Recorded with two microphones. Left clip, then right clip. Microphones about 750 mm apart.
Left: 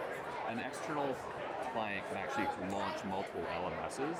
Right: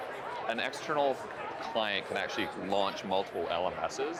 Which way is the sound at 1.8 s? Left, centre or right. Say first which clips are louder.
Right 10 dB; right.